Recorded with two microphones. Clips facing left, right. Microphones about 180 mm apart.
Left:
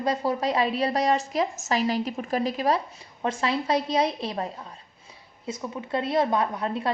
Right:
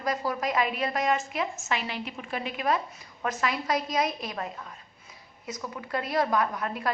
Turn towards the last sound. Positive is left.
turn(degrees=25)  # may be behind; listen again after turning